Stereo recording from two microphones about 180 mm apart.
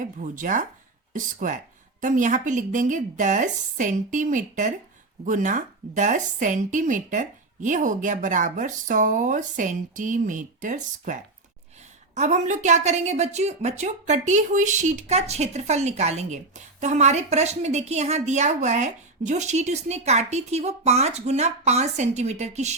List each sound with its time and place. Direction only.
0.0 s a woman's voice: 45° right (ahead or behind)